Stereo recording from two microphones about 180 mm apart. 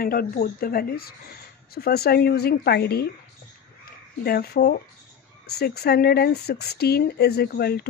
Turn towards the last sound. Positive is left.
turn(degrees=60)  # may be behind; listen again after turning